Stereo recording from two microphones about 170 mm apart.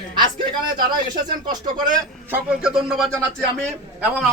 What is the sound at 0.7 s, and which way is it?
Speech, 25° right (ahead or behind).